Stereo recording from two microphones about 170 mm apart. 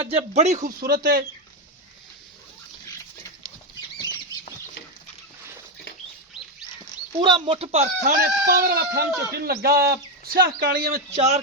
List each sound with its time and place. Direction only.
0.0 s speech: 35° right (ahead or behind); by 1.2 s 65° right (ahead or behind)
7.2 s speech: 30° right (ahead or behind)
8.0 s speech: 60° right (ahead or behind)
11.1 s speech: 35° right (ahead or behind)